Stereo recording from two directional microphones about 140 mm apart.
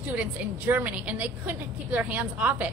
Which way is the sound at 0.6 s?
10° right (ahead or behind).